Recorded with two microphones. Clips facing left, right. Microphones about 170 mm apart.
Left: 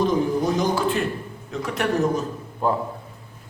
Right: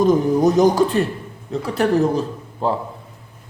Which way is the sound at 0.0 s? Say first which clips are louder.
Right 6 dB; 45° right (ahead or behind).